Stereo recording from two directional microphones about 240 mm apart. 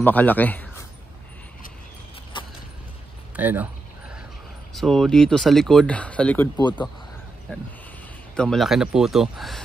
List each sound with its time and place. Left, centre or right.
0.0 s a man's voice: centre
2.3 s a sound: centre
3.3 s speech: centre
4.7 s speech: centre